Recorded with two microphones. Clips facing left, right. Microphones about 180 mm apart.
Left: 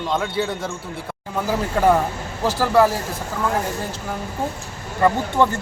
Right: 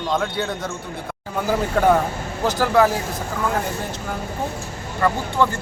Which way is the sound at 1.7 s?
Centre (ahead or behind).